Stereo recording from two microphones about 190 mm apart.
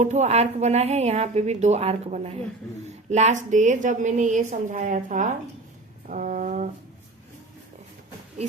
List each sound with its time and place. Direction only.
0.0 s a woman's voice: 35° right (ahead or behind)